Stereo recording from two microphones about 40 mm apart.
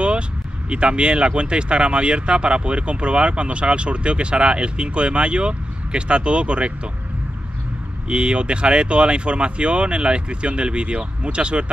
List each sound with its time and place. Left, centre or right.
0.7 s speech: right
8.1 s speech: right